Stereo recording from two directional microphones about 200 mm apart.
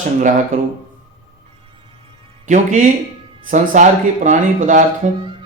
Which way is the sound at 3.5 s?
40° right (ahead or behind).